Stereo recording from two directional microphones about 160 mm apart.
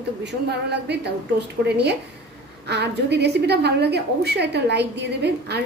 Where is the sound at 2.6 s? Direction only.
90° right.